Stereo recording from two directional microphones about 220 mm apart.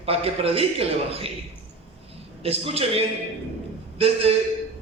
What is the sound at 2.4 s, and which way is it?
A man's voice, 25° right (ahead or behind).